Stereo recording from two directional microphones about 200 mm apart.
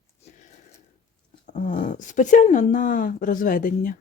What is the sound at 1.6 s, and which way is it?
Speech, 40° left (ahead or behind).